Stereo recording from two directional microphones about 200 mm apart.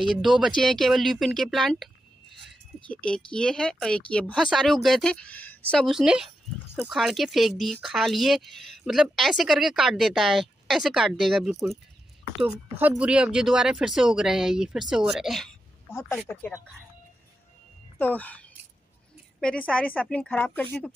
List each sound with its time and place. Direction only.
0.1 s speech: centre (ahead or behind)
2.9 s speech: 5° left (ahead or behind)
15.9 s a woman's voice: 15° left (ahead or behind)
16.2 s speech: centre (ahead or behind)
17.9 s speech: 10° left (ahead or behind)
19.4 s a woman's voice: 5° left (ahead or behind)